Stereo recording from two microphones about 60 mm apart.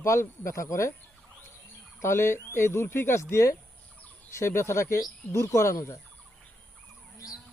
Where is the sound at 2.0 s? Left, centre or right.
Left.